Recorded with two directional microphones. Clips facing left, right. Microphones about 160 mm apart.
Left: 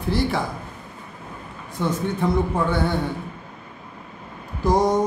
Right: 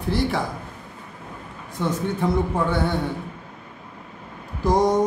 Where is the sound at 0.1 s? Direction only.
Centre (ahead or behind).